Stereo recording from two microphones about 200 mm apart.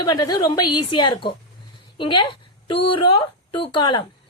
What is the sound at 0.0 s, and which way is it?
Speech, 20° left (ahead or behind).